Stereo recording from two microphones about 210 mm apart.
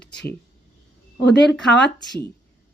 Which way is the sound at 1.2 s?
55° left (ahead or behind).